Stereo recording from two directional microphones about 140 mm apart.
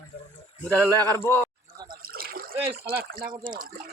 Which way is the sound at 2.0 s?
90° right.